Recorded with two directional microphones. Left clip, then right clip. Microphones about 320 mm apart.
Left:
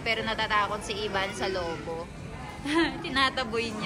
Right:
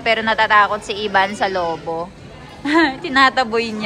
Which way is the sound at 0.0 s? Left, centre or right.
Right.